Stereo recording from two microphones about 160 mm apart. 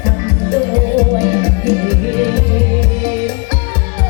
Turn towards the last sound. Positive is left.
turn(degrees=-15)  # may be behind; listen again after turning